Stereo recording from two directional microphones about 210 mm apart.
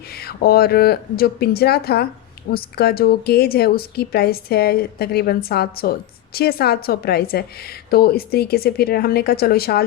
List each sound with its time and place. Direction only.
0.2 s a woman's voice: 50° left (ahead or behind)